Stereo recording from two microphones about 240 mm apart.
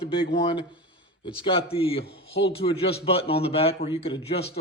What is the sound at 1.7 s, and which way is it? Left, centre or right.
A man's voice, left.